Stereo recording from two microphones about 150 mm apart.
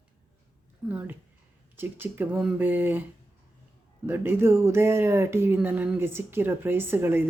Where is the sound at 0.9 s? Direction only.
10° right (ahead or behind).